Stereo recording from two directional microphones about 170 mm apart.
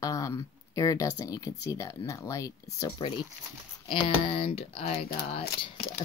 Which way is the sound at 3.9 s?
35° left (ahead or behind).